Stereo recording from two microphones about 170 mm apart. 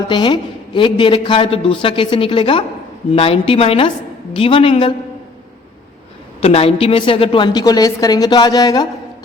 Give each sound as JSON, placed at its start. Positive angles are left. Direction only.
{"t": 0.1, "sound": "a man's voice", "side_deg": 30}
{"t": 6.4, "sound": "a man's voice", "side_deg": 35}